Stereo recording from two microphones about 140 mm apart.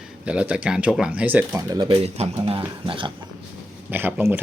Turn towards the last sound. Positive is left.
turn(degrees=-15)  # may be behind; listen again after turning